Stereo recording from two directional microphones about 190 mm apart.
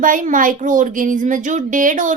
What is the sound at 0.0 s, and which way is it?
Speech, 45° right (ahead or behind).